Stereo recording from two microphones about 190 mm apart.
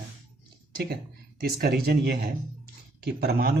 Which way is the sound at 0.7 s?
55° right (ahead or behind).